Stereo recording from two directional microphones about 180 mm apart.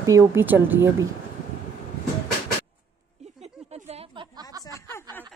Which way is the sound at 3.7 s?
35° right (ahead or behind).